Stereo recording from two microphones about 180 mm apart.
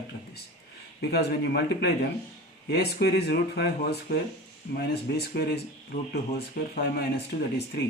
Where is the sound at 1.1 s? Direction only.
65° left (ahead or behind).